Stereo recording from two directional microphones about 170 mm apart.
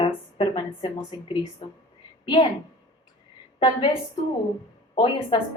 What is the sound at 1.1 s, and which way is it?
Speech, 25° left (ahead or behind).